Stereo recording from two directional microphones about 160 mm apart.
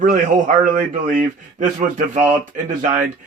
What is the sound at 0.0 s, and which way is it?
A man's voice, 55° right (ahead or behind).